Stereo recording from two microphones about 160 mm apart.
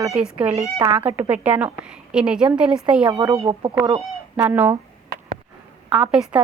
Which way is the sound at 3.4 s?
40° right (ahead or behind).